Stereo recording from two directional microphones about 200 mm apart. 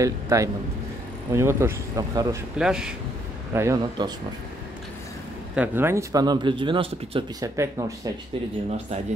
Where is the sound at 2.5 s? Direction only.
5° right (ahead or behind); by 4.2 s 20° right (ahead or behind).